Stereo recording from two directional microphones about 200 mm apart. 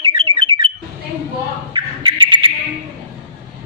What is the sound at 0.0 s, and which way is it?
Bird, 25° right (ahead or behind).